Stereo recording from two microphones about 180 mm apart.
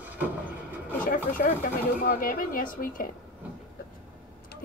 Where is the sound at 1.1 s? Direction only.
50° left (ahead or behind).